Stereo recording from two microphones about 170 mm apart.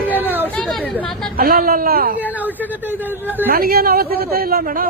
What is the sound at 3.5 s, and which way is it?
Speech, 60° right (ahead or behind).